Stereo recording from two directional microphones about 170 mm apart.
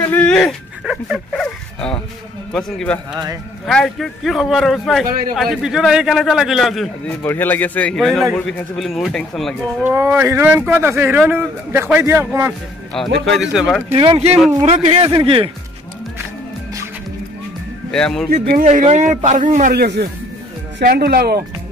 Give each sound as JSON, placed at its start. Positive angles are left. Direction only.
{"t": 0.0, "sound": "a sound", "side_deg": 10}
{"t": 2.5, "sound": "a man's voice", "side_deg": 5}
{"t": 7.1, "sound": "a man's voice", "side_deg": 10}
{"t": 9.8, "sound": "speech", "side_deg": -15}
{"t": 13.2, "sound": "a man's voice", "side_deg": 0}
{"t": 13.9, "sound": "speech", "side_deg": -35}
{"t": 17.9, "sound": "a man's voice", "side_deg": 5}
{"t": 18.3, "sound": "a man's voice", "side_deg": -55}
{"t": 19.7, "sound": "speech", "side_deg": -65}